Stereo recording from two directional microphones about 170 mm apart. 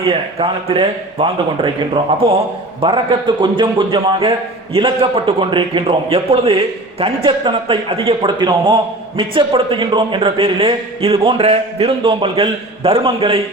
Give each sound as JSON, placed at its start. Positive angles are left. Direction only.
{"t": 0.1, "sound": "a man's voice", "side_deg": -35}